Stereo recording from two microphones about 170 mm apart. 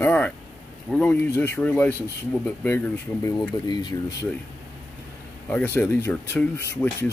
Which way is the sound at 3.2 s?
25° left (ahead or behind).